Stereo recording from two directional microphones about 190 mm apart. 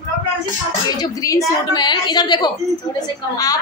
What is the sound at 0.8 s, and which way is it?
A woman's voice, 20° left (ahead or behind).